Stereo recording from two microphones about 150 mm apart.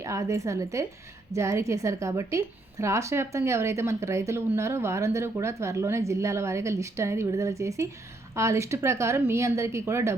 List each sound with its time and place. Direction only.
0.0 s a woman's voice: 20° right (ahead or behind)